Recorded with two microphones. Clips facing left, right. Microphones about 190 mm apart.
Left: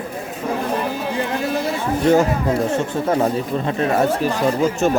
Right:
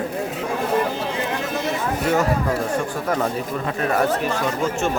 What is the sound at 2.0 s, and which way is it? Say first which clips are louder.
Speech: left 5 dB; 25° left (ahead or behind).